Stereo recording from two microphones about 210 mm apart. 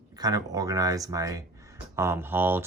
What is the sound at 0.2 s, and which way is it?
Speech, 20° right (ahead or behind).